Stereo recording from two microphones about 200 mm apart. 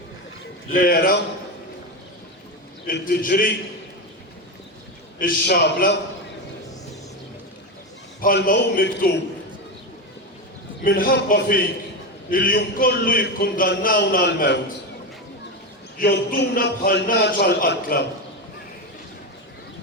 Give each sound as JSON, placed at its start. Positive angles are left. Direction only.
{"t": 0.8, "sound": "a man's voice", "side_deg": 45}
{"t": 2.8, "sound": "a man's voice", "side_deg": 45}
{"t": 5.2, "sound": "a man's voice", "side_deg": 55}
{"t": 8.2, "sound": "a man's voice", "side_deg": 45}
{"t": 10.8, "sound": "a man's voice", "side_deg": 45}
{"t": 16.0, "sound": "a man's voice", "side_deg": 55}